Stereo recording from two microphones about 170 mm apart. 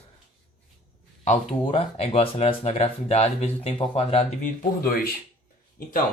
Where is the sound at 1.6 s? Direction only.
35° left (ahead or behind).